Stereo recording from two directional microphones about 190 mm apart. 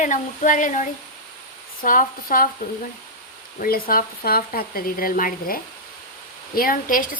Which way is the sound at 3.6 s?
50° left (ahead or behind).